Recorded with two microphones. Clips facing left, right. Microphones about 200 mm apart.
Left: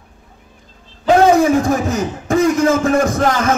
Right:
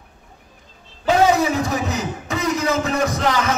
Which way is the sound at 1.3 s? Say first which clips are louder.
Left 7 dB; 50° left (ahead or behind).